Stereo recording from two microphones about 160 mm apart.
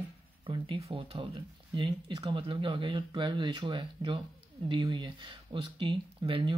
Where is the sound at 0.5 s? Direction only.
35° right (ahead or behind).